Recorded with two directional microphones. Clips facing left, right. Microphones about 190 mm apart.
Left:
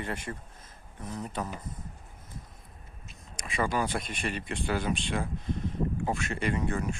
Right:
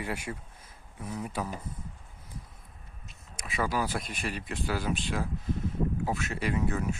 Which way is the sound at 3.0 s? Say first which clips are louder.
Left 1 dB; 5° right (ahead or behind).